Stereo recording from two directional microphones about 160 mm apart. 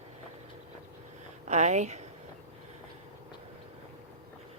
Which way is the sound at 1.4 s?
45° right (ahead or behind).